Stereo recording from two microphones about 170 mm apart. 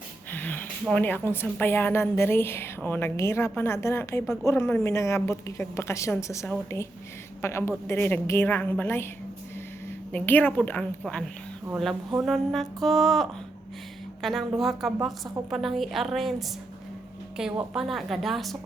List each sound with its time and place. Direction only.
0.3 s a woman's voice: 10° left (ahead or behind)
10.1 s a woman's voice: 10° left (ahead or behind)